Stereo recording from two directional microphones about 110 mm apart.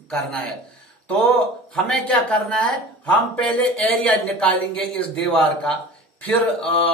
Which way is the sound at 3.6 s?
5° left (ahead or behind).